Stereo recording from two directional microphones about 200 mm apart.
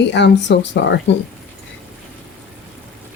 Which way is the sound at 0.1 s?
60° left (ahead or behind).